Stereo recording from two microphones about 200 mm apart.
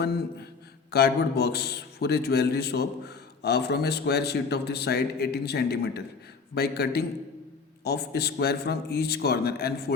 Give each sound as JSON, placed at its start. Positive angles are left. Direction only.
{"t": 0.9, "sound": "a man's voice", "side_deg": 55}